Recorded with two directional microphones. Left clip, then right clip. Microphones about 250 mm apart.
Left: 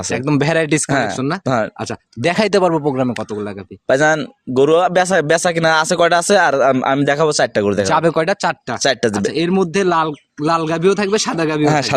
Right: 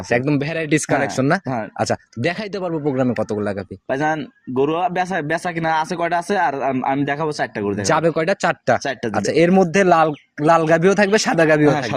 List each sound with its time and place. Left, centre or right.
0.3 s speech: left
0.9 s speech: centre
2.2 s speech: left
2.9 s speech: centre
3.8 s speech: left
8.0 s speech: centre
8.8 s speech: left
9.1 s speech: centre
11.7 s speech: left